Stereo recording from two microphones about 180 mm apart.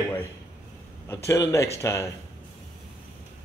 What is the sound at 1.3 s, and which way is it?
Speech, 15° left (ahead or behind).